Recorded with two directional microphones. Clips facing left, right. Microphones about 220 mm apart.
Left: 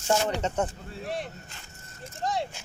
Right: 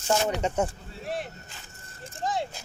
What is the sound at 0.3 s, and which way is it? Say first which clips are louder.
Speech: right 1 dB; 10° right (ahead or behind).